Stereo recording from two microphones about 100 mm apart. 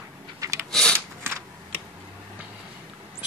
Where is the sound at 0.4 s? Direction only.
30° right (ahead or behind).